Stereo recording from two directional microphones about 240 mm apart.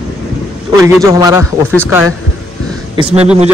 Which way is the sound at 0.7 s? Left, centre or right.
Centre.